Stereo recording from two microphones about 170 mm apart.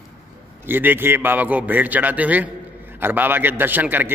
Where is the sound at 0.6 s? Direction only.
10° right (ahead or behind).